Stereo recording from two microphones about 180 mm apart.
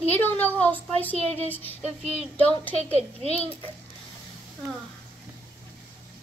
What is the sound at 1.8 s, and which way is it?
Speech, 35° right (ahead or behind).